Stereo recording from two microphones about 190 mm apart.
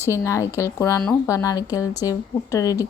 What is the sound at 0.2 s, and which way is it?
Speech, 15° left (ahead or behind).